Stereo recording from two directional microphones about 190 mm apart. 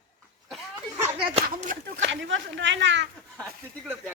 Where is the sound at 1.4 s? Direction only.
50° right (ahead or behind).